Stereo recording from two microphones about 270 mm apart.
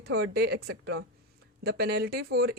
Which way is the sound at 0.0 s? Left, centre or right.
Right.